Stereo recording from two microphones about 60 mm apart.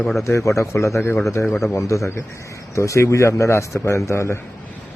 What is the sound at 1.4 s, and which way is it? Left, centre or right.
Speech, centre.